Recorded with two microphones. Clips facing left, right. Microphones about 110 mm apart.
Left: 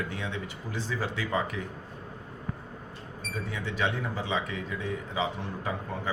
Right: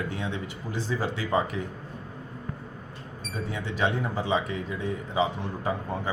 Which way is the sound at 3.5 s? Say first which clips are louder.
Right 3 dB; 35° right (ahead or behind).